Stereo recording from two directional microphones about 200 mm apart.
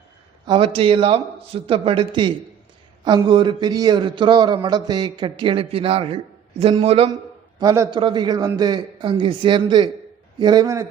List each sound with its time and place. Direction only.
0.4 s a man's voice: 25° right (ahead or behind)
7.6 s a man's voice: 15° right (ahead or behind)